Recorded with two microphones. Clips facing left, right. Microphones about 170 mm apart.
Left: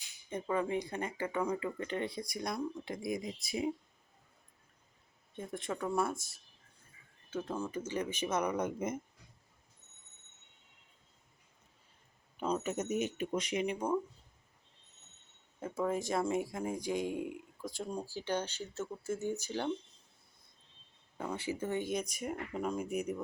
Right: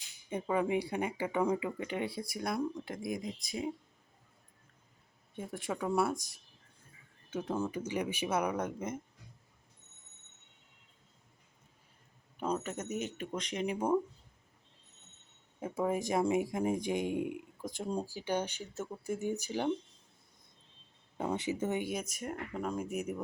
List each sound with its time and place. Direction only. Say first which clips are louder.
0.3 s speech: right 2 dB; 10° right (ahead or behind); by 3.7 s 10° left (ahead or behind)
5.4 s speech: right 1 dB; 10° right (ahead or behind)
12.4 s speech: even; 5° right (ahead or behind)
12.6 s speech: left 3 dB; 10° left (ahead or behind)
13.7 s speech: right 7 dB; 20° right (ahead or behind)
15.6 s speech: right 1 dB; 15° right (ahead or behind)
21.2 s speech: right 4 dB; 20° right (ahead or behind); by 23.2 s 5° right (ahead or behind)